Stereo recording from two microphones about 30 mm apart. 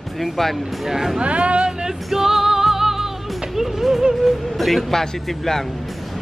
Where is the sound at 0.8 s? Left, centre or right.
Centre.